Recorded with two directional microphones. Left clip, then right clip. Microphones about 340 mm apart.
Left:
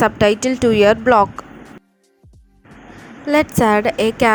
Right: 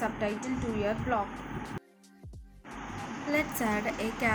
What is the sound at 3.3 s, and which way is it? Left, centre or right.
A woman's voice, left.